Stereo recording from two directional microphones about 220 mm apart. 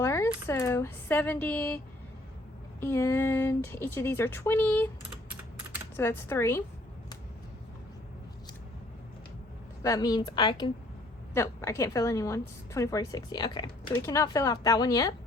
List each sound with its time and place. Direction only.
0.0 s speech: 10° left (ahead or behind)
2.8 s a woman's voice: 10° left (ahead or behind)
6.0 s a woman's voice: 10° left (ahead or behind)
9.8 s a woman's voice: 15° left (ahead or behind)